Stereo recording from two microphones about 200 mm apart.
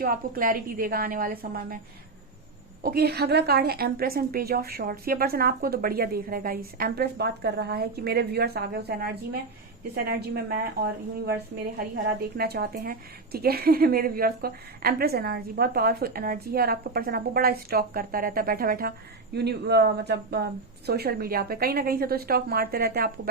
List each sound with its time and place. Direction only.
0.0 s a woman's voice: 45° right (ahead or behind)
2.8 s a woman's voice: 50° right (ahead or behind)
12.4 s a woman's voice: 50° right (ahead or behind)